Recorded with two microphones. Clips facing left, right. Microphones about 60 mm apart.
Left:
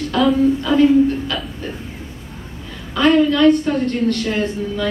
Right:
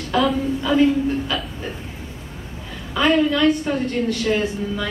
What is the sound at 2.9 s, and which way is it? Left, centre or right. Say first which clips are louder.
A woman's voice: left 3 dB; centre.